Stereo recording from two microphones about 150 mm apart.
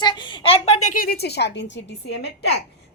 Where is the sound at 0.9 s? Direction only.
80° left.